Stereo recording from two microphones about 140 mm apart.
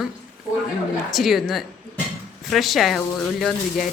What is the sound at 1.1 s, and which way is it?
A woman's voice, centre (ahead or behind).